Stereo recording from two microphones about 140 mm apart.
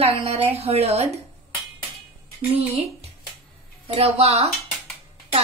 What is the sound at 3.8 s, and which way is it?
Speech, 45° right (ahead or behind).